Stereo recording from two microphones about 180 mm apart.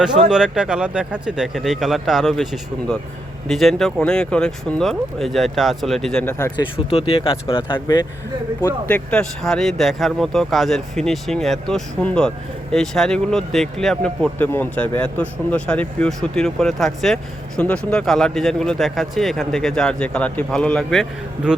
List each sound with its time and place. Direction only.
0.0 s speech: 5° right (ahead or behind)
6.7 s speech: 30° left (ahead or behind)
8.6 s speech: 10° left (ahead or behind)